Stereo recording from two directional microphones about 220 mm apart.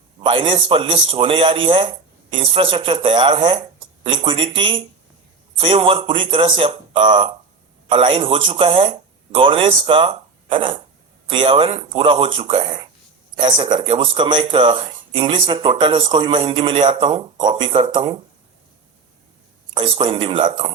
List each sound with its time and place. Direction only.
0.2 s speech: 25° right (ahead or behind)
19.7 s speech: 25° right (ahead or behind)